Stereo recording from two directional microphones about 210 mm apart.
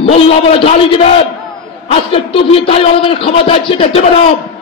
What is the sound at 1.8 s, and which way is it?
A man's voice, 25° left (ahead or behind).